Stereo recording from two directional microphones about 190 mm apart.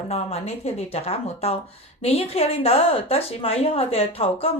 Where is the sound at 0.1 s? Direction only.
35° left (ahead or behind).